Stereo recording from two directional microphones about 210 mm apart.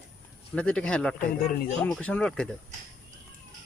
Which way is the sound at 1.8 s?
5° left (ahead or behind).